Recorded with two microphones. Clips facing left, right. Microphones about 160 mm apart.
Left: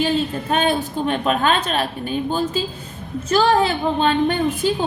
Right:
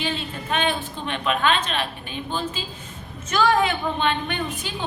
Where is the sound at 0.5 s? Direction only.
40° left (ahead or behind).